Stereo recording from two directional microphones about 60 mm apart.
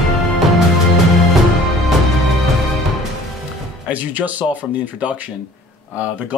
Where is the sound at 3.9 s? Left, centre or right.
Right.